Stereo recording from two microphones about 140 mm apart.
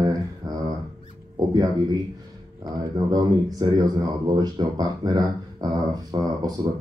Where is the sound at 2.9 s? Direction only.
25° right (ahead or behind).